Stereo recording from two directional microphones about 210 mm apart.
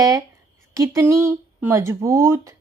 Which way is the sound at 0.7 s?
15° right (ahead or behind).